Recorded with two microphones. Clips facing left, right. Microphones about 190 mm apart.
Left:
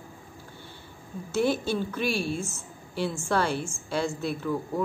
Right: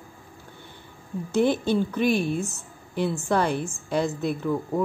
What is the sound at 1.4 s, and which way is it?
A woman's voice, 20° right (ahead or behind).